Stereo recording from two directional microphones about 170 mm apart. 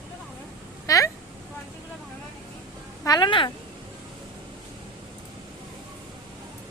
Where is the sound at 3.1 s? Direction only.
25° left (ahead or behind).